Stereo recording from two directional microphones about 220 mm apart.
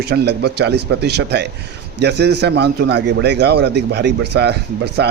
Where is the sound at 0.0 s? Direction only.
50° right (ahead or behind).